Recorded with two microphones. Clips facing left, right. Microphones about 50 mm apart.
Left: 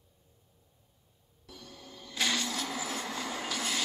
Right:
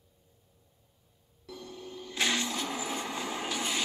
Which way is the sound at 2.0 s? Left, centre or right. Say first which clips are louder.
Right 1 dB; centre.